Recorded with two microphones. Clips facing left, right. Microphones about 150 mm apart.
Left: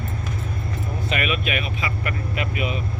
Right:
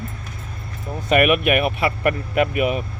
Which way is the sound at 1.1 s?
55° right (ahead or behind).